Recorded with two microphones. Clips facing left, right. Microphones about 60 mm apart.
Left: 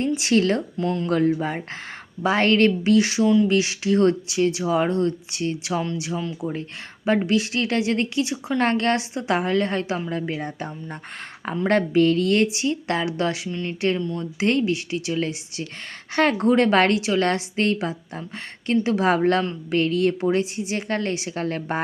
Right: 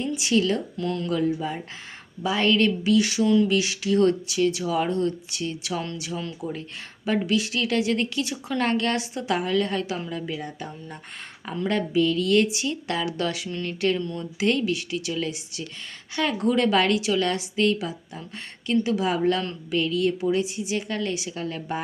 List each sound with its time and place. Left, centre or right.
0.1 s a woman's voice: left
0.8 s a woman's voice: left
1.1 s a woman's voice: left
3.2 s speech: centre
3.5 s a woman's voice: left
8.5 s a woman's voice: left
11.7 s a woman's voice: left
13.5 s speech: centre
14.3 s a woman's voice: left
16.1 s a woman's voice: left
16.5 s a woman's voice: left